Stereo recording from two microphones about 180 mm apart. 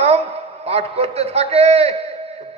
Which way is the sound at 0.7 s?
35° right (ahead or behind).